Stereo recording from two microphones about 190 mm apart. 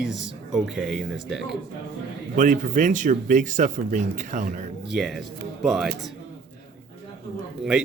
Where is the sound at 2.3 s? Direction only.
45° right (ahead or behind).